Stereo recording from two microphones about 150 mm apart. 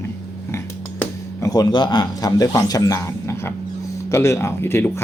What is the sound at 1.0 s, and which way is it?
Speech, 20° left (ahead or behind).